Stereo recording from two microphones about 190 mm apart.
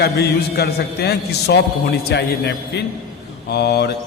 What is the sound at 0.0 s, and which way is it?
A man's voice, 55° left (ahead or behind).